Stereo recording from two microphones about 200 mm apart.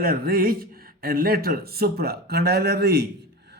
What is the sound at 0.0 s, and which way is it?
Speech, 45° right (ahead or behind).